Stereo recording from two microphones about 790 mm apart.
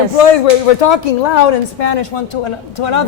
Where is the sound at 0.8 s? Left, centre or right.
Left.